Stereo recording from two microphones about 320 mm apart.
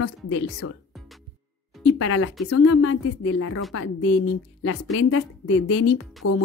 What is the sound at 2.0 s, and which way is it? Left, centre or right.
A woman's voice, left.